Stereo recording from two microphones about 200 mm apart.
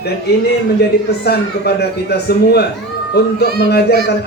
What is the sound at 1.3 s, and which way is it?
A man's voice, 55° left (ahead or behind).